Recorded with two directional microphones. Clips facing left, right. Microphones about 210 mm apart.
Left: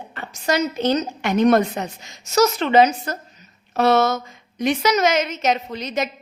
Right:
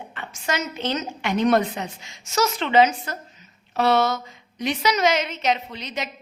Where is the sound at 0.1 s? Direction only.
40° left (ahead or behind).